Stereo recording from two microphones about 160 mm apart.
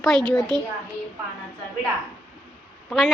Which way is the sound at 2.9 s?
Centre (ahead or behind).